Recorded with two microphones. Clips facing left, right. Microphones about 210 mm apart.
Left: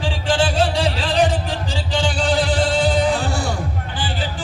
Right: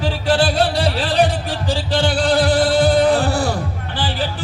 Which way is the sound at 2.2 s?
35° right (ahead or behind).